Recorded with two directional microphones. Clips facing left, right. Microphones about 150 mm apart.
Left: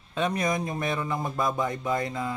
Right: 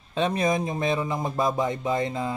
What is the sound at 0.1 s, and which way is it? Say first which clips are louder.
Mantra: right 3 dB; 30° right (ahead or behind).